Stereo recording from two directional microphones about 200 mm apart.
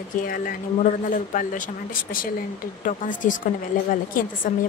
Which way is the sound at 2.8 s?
40° left (ahead or behind).